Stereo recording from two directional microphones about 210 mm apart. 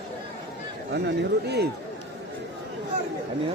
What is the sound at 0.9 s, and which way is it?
Speech, 50° right (ahead or behind).